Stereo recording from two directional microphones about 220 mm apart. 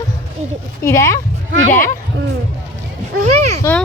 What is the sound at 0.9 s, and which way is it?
Speech, 15° left (ahead or behind).